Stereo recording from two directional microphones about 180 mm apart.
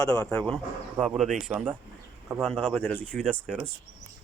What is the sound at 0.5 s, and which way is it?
Speech, centre (ahead or behind).